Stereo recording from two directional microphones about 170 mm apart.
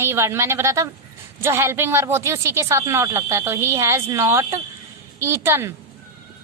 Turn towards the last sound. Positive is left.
turn(degrees=-15)  # may be behind; listen again after turning